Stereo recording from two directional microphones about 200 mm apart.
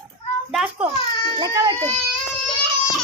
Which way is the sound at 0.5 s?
5° right (ahead or behind).